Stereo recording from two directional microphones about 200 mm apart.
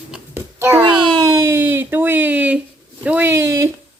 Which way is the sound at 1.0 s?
15° right (ahead or behind).